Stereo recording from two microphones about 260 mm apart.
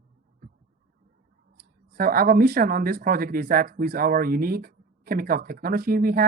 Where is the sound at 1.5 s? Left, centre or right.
Right.